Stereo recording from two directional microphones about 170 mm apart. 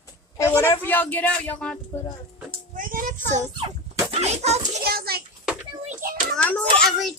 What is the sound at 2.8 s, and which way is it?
Child singing, 55° right (ahead or behind).